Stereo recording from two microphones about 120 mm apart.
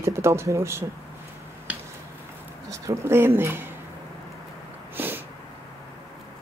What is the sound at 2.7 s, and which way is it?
Speech, 25° right (ahead or behind).